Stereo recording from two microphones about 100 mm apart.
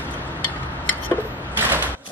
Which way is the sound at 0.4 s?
15° left (ahead or behind).